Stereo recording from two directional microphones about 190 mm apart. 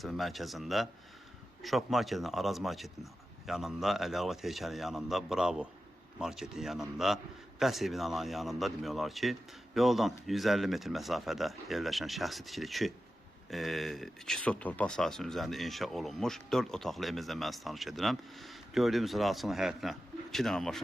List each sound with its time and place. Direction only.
0.0 s speech: centre (ahead or behind)